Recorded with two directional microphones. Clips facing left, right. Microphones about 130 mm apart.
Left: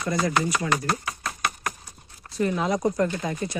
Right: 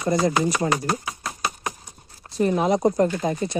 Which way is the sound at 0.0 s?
30° right (ahead or behind).